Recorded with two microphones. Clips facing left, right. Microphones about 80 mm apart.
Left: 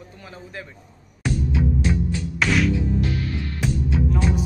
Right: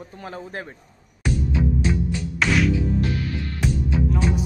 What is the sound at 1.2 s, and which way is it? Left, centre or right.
Music, centre.